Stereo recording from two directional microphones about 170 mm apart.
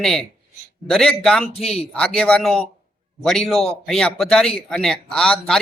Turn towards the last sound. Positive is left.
turn(degrees=5)  # may be behind; listen again after turning